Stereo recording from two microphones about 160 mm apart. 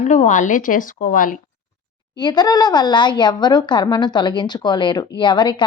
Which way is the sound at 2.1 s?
25° left (ahead or behind).